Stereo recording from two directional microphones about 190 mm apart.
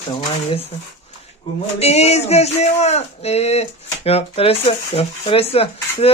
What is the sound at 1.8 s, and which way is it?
Speech, 35° left (ahead or behind).